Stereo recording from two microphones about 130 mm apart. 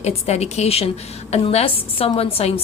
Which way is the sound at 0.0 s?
55° left (ahead or behind).